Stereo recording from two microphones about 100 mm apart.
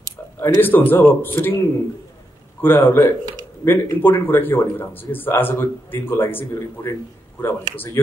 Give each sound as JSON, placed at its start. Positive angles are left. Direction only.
{"t": 0.4, "sound": "speech", "side_deg": 20}
{"t": 2.6, "sound": "speech", "side_deg": 20}